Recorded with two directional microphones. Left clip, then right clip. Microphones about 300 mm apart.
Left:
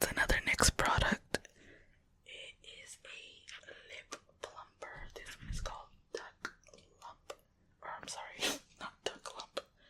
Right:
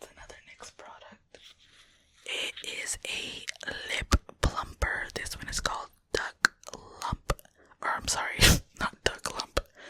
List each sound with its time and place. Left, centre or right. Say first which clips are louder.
0.0 s whispering: left 16 dB; left
2.2 s whispering: right 17 dB; right